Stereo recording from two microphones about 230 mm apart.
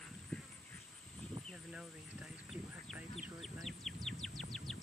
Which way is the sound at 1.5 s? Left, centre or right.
Centre.